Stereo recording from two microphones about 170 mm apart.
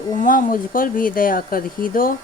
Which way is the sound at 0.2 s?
55° left (ahead or behind).